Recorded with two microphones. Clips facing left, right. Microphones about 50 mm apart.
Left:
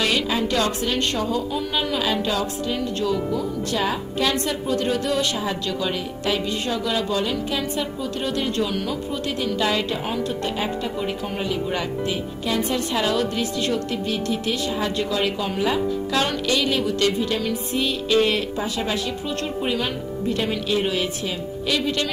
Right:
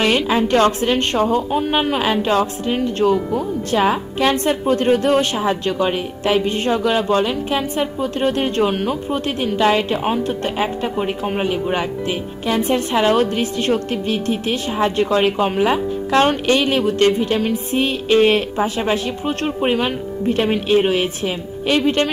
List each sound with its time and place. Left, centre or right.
0.0 s a woman's voice: right